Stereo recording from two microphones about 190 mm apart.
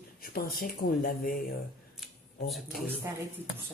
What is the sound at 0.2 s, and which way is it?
Speech, 50° left (ahead or behind).